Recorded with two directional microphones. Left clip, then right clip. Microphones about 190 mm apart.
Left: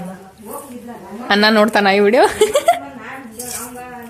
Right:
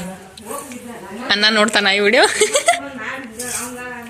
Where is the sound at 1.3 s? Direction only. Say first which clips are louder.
Left 2 dB; 20° left (ahead or behind).